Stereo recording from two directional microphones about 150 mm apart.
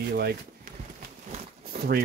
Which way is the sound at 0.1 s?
90° right.